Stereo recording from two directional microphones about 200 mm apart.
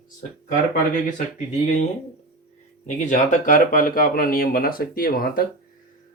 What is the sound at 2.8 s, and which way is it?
Speech, 40° left (ahead or behind).